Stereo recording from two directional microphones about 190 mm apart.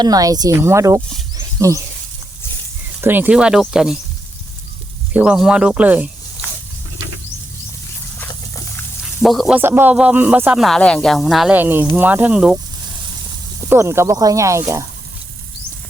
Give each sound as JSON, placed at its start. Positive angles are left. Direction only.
{"t": 0.0, "sound": "speech", "side_deg": -20}
{"t": 1.4, "sound": "a sound", "side_deg": -15}
{"t": 3.0, "sound": "speech", "side_deg": -10}
{"t": 5.1, "sound": "speech", "side_deg": -5}
{"t": 8.3, "sound": "a sound", "side_deg": 15}
{"t": 9.2, "sound": "speech", "side_deg": 0}
{"t": 9.6, "sound": "speech", "side_deg": -10}
{"t": 13.7, "sound": "speech", "side_deg": -15}